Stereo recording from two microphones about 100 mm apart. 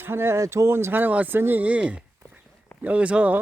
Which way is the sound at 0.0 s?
25° right (ahead or behind).